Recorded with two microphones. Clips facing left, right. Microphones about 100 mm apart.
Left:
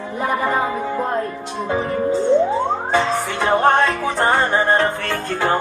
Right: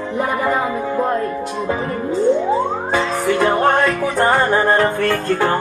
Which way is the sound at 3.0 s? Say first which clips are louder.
Right 3 dB; 25° left (ahead or behind).